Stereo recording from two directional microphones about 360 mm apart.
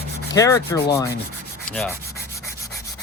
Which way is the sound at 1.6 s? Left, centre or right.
Centre.